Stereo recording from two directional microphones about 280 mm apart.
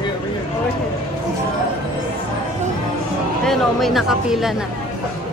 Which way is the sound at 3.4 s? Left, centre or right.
Centre.